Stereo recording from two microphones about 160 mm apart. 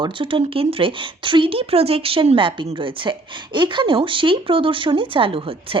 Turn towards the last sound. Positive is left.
turn(degrees=-35)  # may be behind; listen again after turning